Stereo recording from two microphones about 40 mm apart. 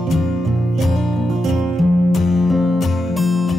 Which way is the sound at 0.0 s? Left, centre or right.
Centre.